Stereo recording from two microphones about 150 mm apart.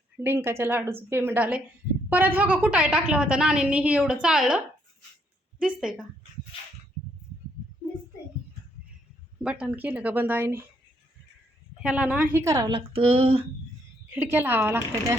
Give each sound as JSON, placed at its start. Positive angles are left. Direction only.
{"t": 0.2, "sound": "a woman's voice", "side_deg": -15}
{"t": 9.4, "sound": "a woman's voice", "side_deg": -5}
{"t": 11.8, "sound": "a woman's voice", "side_deg": -5}
{"t": 12.9, "sound": "a sound", "side_deg": -40}
{"t": 14.1, "sound": "a woman's voice", "side_deg": -15}